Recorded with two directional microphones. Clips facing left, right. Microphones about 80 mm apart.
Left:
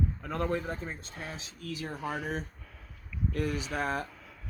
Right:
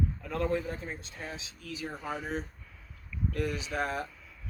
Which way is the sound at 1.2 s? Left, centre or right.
Left.